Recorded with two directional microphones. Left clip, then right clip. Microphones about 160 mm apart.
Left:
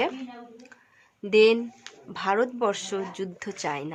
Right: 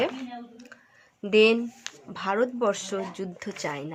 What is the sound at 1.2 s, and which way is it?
Speech, 5° left (ahead or behind).